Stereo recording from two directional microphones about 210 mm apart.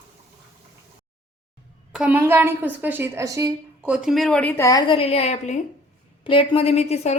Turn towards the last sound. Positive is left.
turn(degrees=30)  # may be behind; listen again after turning